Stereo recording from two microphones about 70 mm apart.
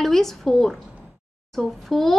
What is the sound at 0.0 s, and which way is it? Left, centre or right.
A woman's voice, centre.